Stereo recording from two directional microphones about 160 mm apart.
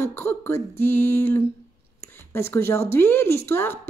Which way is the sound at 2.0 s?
15° left (ahead or behind).